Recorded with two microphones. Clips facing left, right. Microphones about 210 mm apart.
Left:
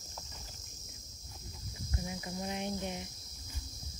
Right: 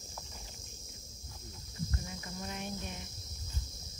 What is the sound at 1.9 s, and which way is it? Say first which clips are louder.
Cricket: left 3 dB; 15° left (ahead or behind).